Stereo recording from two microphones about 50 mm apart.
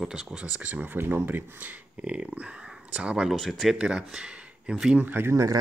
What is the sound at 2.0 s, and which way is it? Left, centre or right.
Speech, right.